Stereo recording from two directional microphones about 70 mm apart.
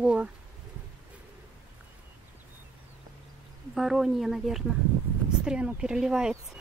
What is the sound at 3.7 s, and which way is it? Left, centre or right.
A woman's voice, centre.